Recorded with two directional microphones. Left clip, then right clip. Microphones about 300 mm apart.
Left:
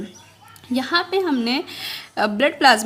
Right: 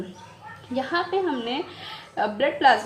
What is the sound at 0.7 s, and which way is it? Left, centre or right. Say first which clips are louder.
A woman's voice: left 4 dB; left.